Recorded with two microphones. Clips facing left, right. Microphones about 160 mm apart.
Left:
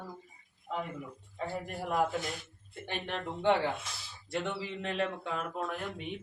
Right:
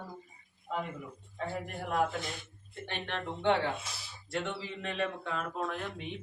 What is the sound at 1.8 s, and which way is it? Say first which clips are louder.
Speech: left 1 dB; 5° left (ahead or behind).